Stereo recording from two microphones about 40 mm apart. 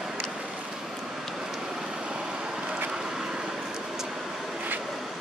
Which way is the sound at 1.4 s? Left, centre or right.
Centre.